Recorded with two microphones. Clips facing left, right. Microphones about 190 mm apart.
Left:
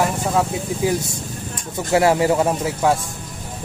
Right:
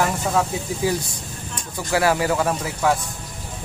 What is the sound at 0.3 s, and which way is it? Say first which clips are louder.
Speech: left 2 dB; 10° left (ahead or behind).